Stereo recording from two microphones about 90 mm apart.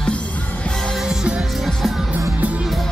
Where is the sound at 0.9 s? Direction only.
5° right (ahead or behind).